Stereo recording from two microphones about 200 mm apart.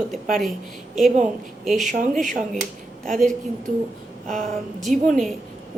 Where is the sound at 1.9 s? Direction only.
40° right (ahead or behind).